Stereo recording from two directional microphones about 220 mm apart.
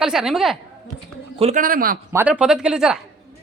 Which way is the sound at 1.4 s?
35° right (ahead or behind).